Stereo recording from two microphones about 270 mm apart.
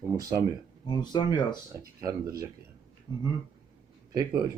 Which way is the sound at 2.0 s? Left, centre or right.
Centre.